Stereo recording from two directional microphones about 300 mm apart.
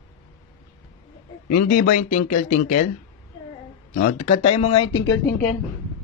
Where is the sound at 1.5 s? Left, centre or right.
Left.